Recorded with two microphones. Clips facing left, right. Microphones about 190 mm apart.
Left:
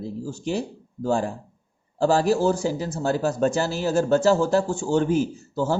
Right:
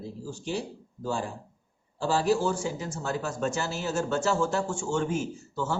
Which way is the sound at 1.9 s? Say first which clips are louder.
Left 5 dB; 45° left (ahead or behind).